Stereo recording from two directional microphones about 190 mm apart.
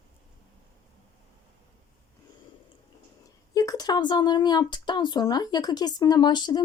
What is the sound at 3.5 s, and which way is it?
Speech, 20° left (ahead or behind).